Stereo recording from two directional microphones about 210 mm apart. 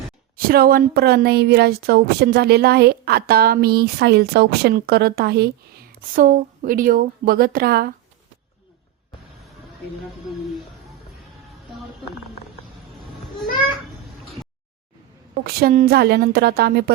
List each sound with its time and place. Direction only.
0.3 s a woman's voice: 45° right (ahead or behind)
15.4 s a woman's voice: 45° right (ahead or behind)